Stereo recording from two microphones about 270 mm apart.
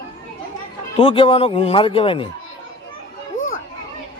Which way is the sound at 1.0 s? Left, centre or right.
Centre.